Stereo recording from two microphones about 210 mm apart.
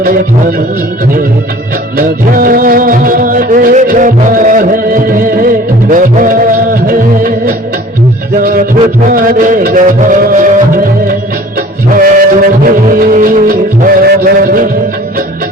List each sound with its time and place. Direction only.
2.0 s music: 40° right (ahead or behind)
11.9 s music: 40° right (ahead or behind)